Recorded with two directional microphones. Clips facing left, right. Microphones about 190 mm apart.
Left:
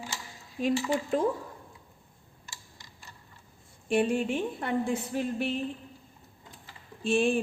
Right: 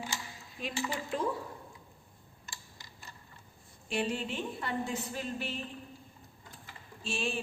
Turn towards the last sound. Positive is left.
turn(degrees=55)  # may be behind; listen again after turning